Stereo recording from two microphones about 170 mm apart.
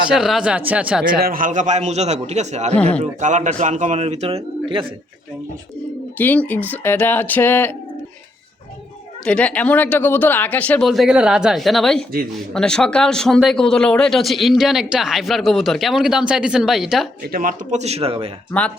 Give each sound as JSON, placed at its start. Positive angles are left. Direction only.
{"t": 0.1, "sound": "speech", "side_deg": -5}
{"t": 1.2, "sound": "a man's voice", "side_deg": -55}
{"t": 2.7, "sound": "speech", "side_deg": 10}
{"t": 3.0, "sound": "a man's voice", "side_deg": -45}
{"t": 6.1, "sound": "speech", "side_deg": 10}
{"t": 9.2, "sound": "speech", "side_deg": 5}
{"t": 17.2, "sound": "speech", "side_deg": -60}
{"t": 17.7, "sound": "a man's voice", "side_deg": -40}
{"t": 18.5, "sound": "speech", "side_deg": 10}